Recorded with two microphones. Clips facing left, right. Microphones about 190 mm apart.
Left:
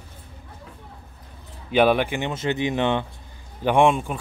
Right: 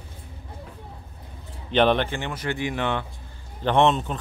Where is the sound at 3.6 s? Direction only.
10° left (ahead or behind).